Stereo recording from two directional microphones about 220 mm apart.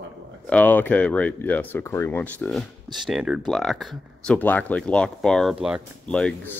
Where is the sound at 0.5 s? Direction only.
5° left (ahead or behind).